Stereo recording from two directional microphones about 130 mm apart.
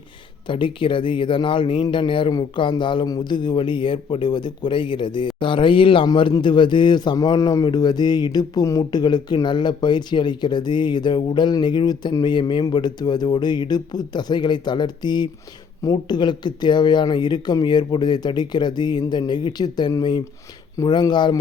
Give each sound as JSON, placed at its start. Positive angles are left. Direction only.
{"t": 0.4, "sound": "a man's voice", "side_deg": 40}